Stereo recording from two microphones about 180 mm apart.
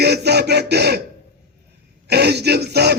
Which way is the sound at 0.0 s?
65° right (ahead or behind).